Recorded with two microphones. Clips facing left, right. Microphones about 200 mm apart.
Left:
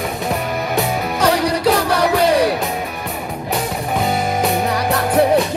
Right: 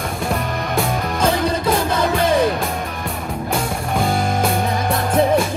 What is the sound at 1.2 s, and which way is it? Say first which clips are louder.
Music: left 3 dB; 85° left.